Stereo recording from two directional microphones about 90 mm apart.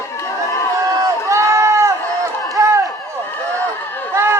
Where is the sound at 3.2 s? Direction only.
20° left (ahead or behind).